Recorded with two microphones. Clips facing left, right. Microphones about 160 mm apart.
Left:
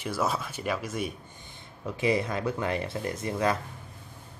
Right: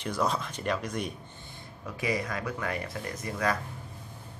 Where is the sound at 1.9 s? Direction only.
25° left (ahead or behind).